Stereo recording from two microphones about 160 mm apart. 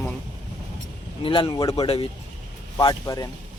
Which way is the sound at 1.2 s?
30° left (ahead or behind).